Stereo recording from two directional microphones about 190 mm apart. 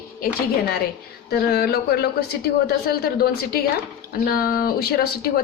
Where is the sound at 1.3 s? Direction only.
55° left (ahead or behind).